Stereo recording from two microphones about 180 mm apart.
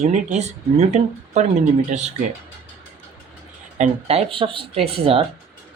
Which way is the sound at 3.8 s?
35° right (ahead or behind).